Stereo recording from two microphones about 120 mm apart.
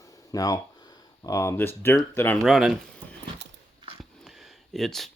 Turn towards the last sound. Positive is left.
turn(degrees=0)  # may be behind; listen again after turning